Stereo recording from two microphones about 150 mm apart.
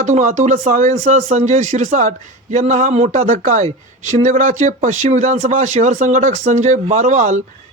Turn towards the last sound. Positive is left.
turn(degrees=-55)  # may be behind; listen again after turning